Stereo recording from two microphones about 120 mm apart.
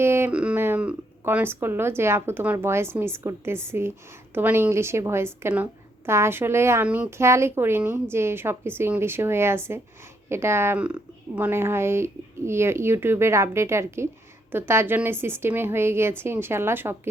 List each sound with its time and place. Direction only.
0.0 s a sound: 20° right (ahead or behind)
0.3 s speech: 10° right (ahead or behind)
6.8 s speech: 10° right (ahead or behind)
7.2 s speech: 20° right (ahead or behind)